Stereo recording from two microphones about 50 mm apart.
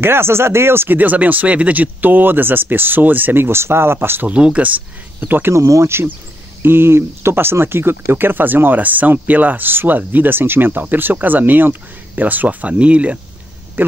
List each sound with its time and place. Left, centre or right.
0.0 s speech: right
0.8 s speech: right
4.3 s speech: right
5.2 s speech: right
5.5 s speech: right
6.6 s speech: right
13.8 s a sound: right